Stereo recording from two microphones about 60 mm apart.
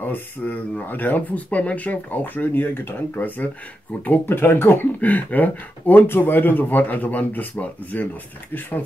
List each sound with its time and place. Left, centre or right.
0.0 s speech: left